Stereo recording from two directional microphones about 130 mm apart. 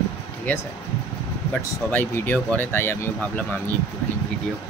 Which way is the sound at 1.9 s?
15° left (ahead or behind).